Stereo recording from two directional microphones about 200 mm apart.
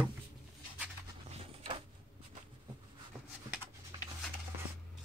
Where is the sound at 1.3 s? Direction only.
30° right (ahead or behind).